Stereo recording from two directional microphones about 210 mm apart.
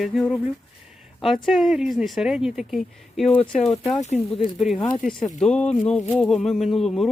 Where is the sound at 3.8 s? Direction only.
30° left (ahead or behind).